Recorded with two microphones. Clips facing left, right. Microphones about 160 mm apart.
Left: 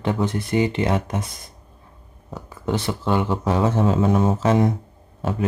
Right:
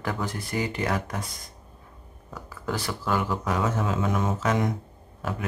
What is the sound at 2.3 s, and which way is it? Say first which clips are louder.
Speech: left 6 dB; 25° left (ahead or behind).